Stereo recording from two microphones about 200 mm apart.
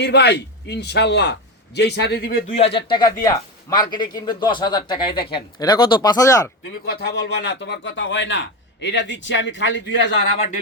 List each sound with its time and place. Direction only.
0.0 s a man's voice: 60° left (ahead or behind)
2.6 s speech: 30° left (ahead or behind)
6.8 s a man's voice: 55° left (ahead or behind)